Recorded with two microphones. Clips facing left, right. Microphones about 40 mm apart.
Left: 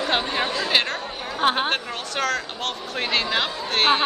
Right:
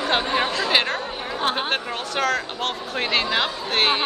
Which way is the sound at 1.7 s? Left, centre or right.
Centre.